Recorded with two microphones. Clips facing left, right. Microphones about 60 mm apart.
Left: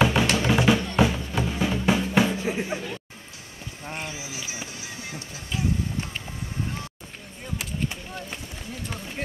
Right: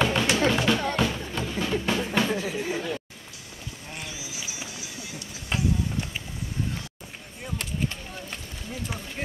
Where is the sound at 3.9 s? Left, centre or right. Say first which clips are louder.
Left 5 dB; left.